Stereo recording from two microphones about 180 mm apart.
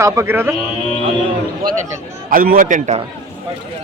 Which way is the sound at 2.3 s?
50° right (ahead or behind).